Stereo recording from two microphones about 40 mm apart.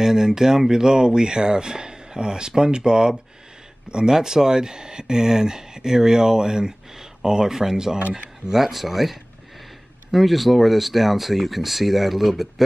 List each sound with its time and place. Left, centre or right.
0.0 s speech: centre